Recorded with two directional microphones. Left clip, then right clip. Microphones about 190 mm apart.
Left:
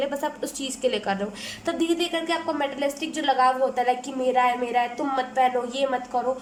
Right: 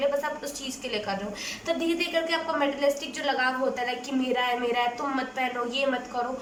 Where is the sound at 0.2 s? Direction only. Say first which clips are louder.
Left 2 dB; 40° left (ahead or behind).